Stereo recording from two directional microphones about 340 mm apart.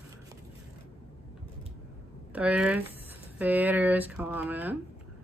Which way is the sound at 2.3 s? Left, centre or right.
Centre.